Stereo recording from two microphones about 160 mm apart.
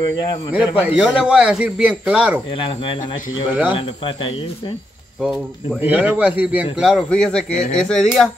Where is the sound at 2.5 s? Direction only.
30° left (ahead or behind).